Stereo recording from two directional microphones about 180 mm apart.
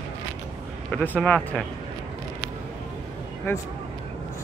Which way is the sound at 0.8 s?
5° left (ahead or behind).